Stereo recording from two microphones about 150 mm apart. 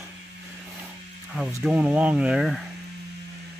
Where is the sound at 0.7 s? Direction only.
15° right (ahead or behind).